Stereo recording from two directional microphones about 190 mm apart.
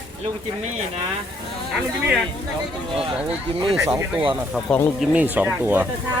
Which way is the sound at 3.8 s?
15° right (ahead or behind).